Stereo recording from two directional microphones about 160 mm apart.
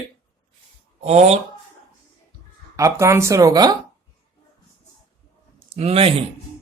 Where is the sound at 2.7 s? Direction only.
20° right (ahead or behind).